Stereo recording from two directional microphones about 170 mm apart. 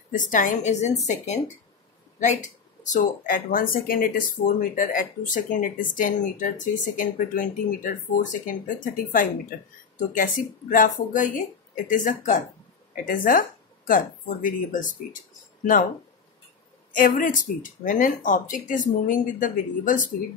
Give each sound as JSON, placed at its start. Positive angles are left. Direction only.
{"t": 0.1, "sound": "speech", "side_deg": 50}
{"t": 16.9, "sound": "speech", "side_deg": 55}